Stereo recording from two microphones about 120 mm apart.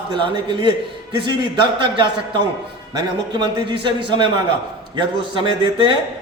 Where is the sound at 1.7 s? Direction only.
45° right (ahead or behind).